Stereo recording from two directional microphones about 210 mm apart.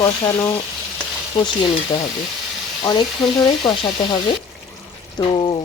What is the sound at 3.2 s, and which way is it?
Speech, 5° left (ahead or behind).